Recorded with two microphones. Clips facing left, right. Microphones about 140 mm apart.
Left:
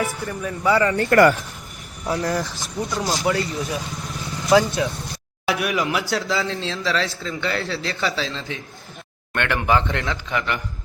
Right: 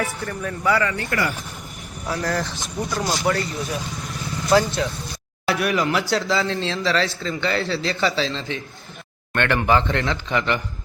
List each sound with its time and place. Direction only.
0.2 s a man's voice: 10° left (ahead or behind)
0.6 s speech: 25° left (ahead or behind)
0.9 s speech: 50° left (ahead or behind)
2.0 s speech: 20° left (ahead or behind)
2.4 s a man's voice: centre (ahead or behind)
3.2 s speech: 20° left (ahead or behind)
5.7 s a man's voice: centre (ahead or behind)